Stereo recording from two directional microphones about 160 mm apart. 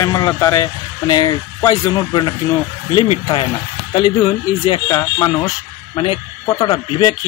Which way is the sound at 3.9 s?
30° left (ahead or behind).